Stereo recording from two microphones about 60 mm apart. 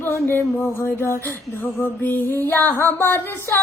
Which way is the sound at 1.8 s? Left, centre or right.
Left.